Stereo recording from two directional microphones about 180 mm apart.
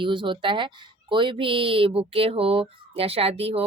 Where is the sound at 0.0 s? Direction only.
25° right (ahead or behind).